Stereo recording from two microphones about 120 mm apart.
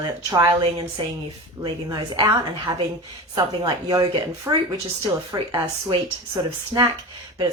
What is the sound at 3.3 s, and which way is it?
Speech, 35° right (ahead or behind).